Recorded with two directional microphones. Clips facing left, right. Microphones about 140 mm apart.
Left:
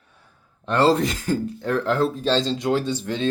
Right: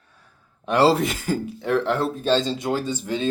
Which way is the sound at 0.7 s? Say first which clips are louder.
Even; 10° right (ahead or behind).